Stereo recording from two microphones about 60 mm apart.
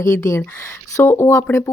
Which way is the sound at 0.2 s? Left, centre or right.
Left.